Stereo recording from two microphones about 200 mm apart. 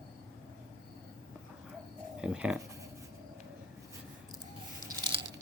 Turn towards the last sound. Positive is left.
turn(degrees=-20)  # may be behind; listen again after turning